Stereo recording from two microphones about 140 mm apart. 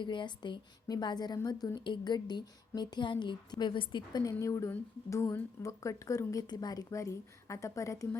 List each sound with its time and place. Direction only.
0.0 s a woman's voice: 35° left (ahead or behind)